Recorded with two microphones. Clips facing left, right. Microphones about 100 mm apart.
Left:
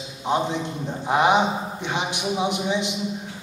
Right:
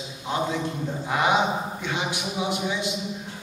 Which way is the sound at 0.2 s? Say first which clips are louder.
Left 3 dB; 25° left (ahead or behind).